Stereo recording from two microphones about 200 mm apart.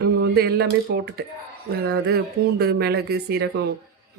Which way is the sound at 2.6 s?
55° right (ahead or behind).